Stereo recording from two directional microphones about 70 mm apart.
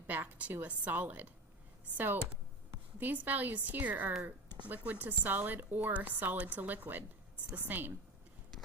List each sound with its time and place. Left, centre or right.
0.1 s a woman's voice: right
3.0 s a woman's voice: right